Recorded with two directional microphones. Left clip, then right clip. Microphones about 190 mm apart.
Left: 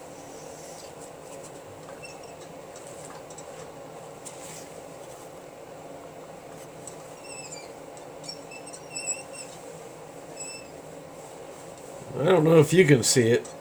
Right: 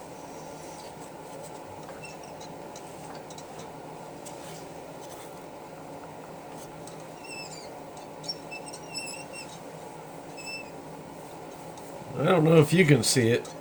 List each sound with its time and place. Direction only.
12.2 s speech: 15° left (ahead or behind)